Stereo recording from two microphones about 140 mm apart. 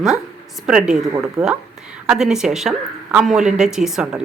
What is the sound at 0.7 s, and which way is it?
A woman's voice, 5° right (ahead or behind).